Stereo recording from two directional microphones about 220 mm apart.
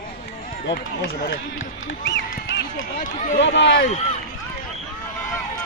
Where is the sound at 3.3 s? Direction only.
50° left (ahead or behind).